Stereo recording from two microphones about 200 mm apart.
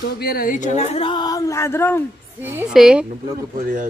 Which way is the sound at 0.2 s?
45° left (ahead or behind).